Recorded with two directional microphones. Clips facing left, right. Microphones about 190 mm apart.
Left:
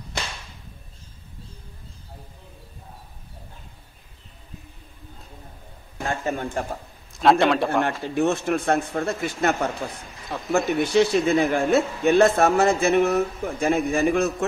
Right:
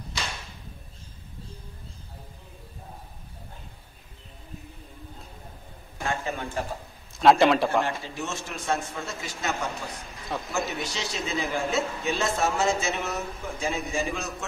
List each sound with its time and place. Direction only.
6.0 s a sound: 45° left (ahead or behind)
7.2 s a man's voice: centre (ahead or behind)
7.8 s speech: 60° left (ahead or behind)
10.3 s a man's voice: centre (ahead or behind)
10.7 s speech: 55° left (ahead or behind)